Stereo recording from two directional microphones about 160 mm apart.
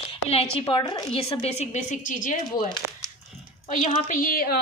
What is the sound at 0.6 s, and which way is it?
A woman's voice, 30° left (ahead or behind).